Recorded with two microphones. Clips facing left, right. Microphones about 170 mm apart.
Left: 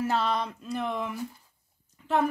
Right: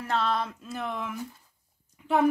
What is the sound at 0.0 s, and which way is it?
Speech, centre (ahead or behind).